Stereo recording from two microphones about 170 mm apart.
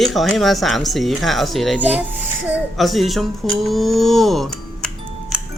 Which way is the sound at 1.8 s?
10° right (ahead or behind).